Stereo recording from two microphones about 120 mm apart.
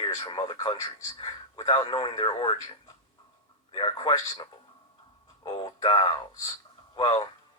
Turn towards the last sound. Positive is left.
turn(degrees=40)  # may be behind; listen again after turning